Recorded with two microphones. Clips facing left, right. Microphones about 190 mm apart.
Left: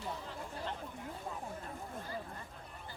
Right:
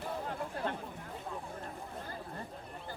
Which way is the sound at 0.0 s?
55° right (ahead or behind).